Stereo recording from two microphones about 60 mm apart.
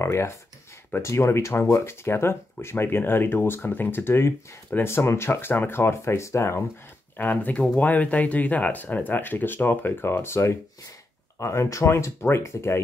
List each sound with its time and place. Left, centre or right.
0.0 s speech: left
7.2 s speech: left